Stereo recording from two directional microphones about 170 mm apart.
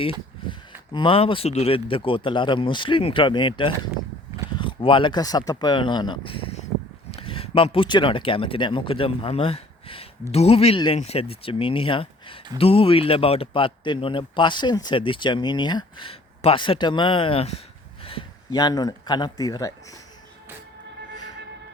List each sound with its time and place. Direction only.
0.9 s speech: 30° left (ahead or behind)